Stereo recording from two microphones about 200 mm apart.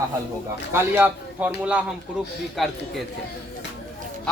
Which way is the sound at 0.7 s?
10° right (ahead or behind).